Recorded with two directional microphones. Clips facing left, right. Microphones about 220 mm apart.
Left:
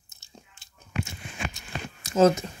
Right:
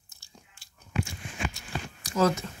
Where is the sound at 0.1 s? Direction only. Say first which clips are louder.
Left 4 dB; 20° left (ahead or behind).